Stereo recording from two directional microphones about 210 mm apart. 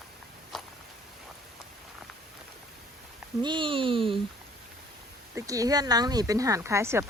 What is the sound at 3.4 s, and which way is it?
Speech, 25° right (ahead or behind).